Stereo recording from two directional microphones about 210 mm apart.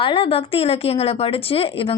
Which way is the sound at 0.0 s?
25° left (ahead or behind).